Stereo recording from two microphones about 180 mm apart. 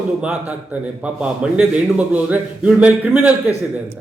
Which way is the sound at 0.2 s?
5° right (ahead or behind).